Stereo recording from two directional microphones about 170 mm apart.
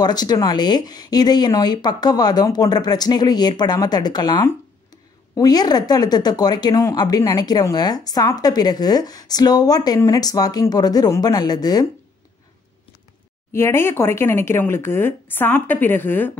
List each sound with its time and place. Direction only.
0.0 s speech: 25° left (ahead or behind)
13.5 s speech: 15° left (ahead or behind)